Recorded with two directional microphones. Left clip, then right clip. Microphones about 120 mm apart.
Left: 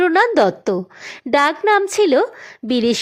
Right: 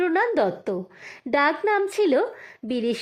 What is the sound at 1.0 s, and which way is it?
A woman's voice, 25° left (ahead or behind).